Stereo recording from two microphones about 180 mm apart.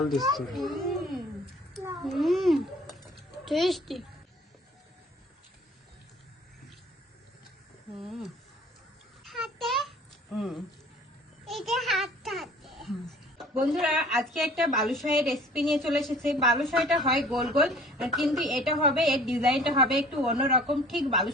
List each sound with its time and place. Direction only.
0.3 s a child's voice: centre (ahead or behind)
7.9 s a child's voice: centre (ahead or behind)
9.2 s a sound: centre (ahead or behind)
10.3 s a child's voice: centre (ahead or behind)
20.4 s a woman's voice: 30° right (ahead or behind)
20.7 s a child's voice: centre (ahead or behind)